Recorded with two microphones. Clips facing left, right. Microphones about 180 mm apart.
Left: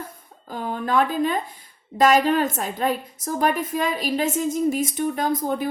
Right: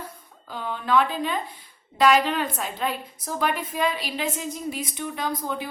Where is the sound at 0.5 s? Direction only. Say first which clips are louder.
Left 1 dB; 45° left (ahead or behind).